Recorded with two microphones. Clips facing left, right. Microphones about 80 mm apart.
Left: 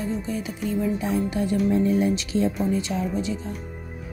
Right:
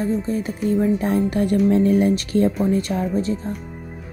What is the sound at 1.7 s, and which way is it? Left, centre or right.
Speech, right.